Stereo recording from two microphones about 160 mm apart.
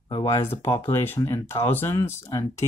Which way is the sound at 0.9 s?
15° left (ahead or behind).